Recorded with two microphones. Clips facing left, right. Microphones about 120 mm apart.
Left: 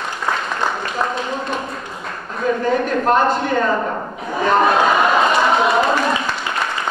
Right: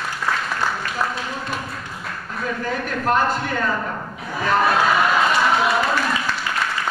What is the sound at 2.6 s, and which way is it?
A man's voice, 30° left (ahead or behind).